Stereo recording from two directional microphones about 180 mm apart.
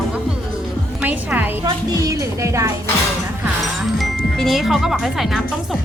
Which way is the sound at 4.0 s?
Centre (ahead or behind).